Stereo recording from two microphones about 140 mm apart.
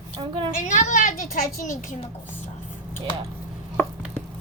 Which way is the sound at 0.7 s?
65° left (ahead or behind).